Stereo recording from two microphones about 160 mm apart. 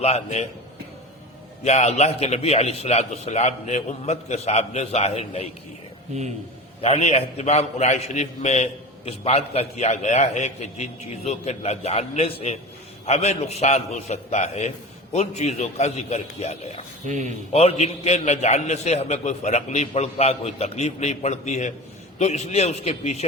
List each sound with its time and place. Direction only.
0.0 s a man's voice: 45° left (ahead or behind)
1.6 s a man's voice: 45° left (ahead or behind)
6.8 s a man's voice: 40° left (ahead or behind)
17.1 s speech: 50° right (ahead or behind)
17.5 s a man's voice: 40° left (ahead or behind)